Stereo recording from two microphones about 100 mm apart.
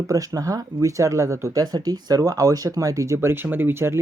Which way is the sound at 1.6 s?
40° right (ahead or behind).